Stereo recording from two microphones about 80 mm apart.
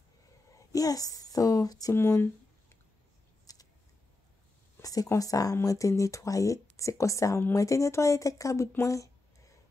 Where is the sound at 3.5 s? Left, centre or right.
Left.